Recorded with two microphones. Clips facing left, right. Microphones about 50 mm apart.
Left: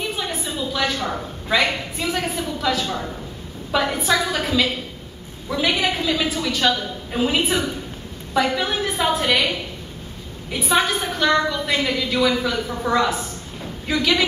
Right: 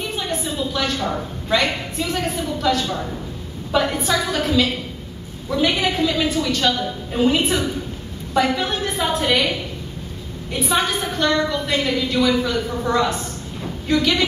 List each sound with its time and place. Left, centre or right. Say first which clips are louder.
0.1 s a sound: right 2 dB; centre
1.0 s a woman's voice: right 2 dB; centre
10.5 s a woman's voice: left 1 dB; centre